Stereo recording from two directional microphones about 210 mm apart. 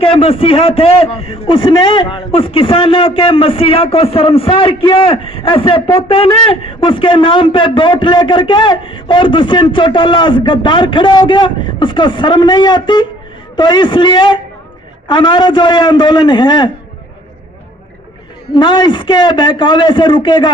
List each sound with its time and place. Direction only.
0.0 s a man's voice: 25° left (ahead or behind)
18.5 s a man's voice: 20° left (ahead or behind)